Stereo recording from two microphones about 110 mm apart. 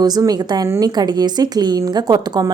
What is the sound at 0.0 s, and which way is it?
A woman's voice, 35° right (ahead or behind).